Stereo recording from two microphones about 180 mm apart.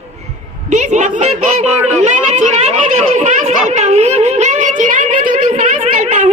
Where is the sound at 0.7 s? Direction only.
40° right (ahead or behind).